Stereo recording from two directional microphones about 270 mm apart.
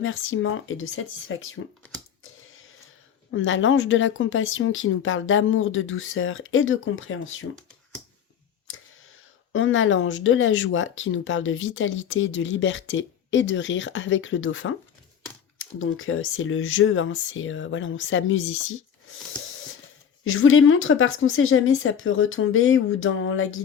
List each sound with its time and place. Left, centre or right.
0.0 s speech: left
3.3 s speech: left
9.5 s speech: left
20.2 s speech: left